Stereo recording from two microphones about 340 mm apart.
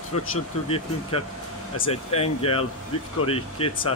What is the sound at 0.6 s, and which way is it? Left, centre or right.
Speech, centre.